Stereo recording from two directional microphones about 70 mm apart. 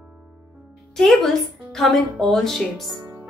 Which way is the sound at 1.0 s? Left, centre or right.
Centre.